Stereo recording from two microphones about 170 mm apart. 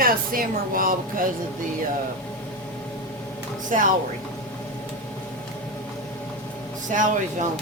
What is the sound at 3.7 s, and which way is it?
Speech, 50° right (ahead or behind).